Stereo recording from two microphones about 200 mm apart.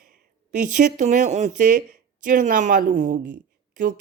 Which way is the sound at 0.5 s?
40° right (ahead or behind).